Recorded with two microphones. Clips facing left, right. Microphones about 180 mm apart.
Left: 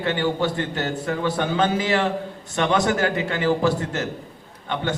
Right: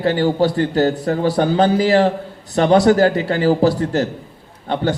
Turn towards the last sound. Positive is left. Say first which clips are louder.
# right 6 dB
turn(degrees=-35)  # may be behind; listen again after turning